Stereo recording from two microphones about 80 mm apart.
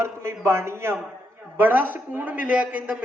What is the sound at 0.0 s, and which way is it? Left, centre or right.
A man's voice, right.